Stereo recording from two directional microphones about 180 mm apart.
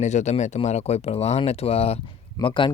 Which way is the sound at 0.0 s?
40° left (ahead or behind).